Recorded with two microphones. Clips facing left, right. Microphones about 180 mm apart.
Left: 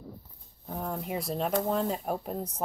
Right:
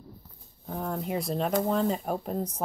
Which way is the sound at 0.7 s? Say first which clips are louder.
Right 2 dB; centre (ahead or behind).